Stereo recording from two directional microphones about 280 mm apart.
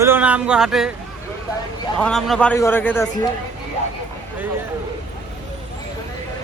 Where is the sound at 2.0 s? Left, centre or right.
Centre.